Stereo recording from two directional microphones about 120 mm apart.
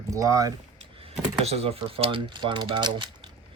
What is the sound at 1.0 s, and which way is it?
Speech, 60° right (ahead or behind).